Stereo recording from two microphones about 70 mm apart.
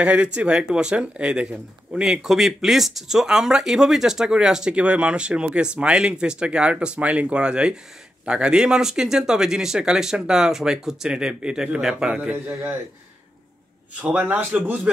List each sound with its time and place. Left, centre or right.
0.0 s speech: centre
14.0 s a man's voice: right